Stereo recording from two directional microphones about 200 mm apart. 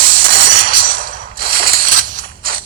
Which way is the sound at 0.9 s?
40° right (ahead or behind).